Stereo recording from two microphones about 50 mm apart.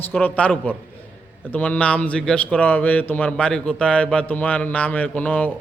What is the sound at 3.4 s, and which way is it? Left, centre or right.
A man's voice, centre.